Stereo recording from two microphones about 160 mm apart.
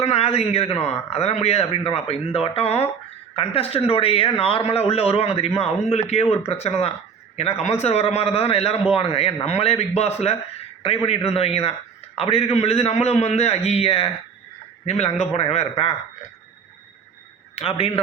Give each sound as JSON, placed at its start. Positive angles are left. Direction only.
{"t": 0.0, "sound": "a man's voice", "side_deg": 40}
{"t": 17.5, "sound": "a man's voice", "side_deg": 35}